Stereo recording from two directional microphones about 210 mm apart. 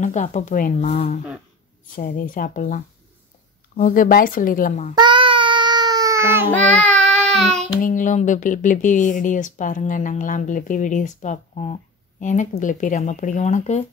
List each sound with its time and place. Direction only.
0.0 s speech: 35° left (ahead or behind)
4.9 s baby cry: 20° right (ahead or behind)
6.5 s child singing: 5° left (ahead or behind)
7.8 s speech: 35° left (ahead or behind)